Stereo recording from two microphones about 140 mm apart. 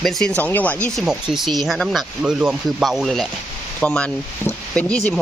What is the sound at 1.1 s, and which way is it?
Speech, 5° right (ahead or behind).